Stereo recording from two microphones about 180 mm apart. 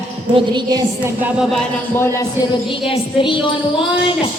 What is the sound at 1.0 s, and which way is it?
Speech, 10° right (ahead or behind).